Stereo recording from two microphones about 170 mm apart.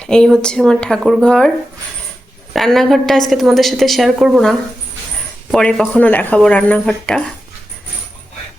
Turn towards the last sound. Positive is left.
turn(degrees=5)  # may be behind; listen again after turning